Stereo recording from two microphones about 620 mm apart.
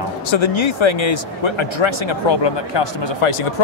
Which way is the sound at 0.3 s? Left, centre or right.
Left.